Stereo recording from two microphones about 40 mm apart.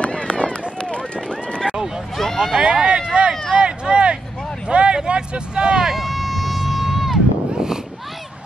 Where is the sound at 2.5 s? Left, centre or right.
Right.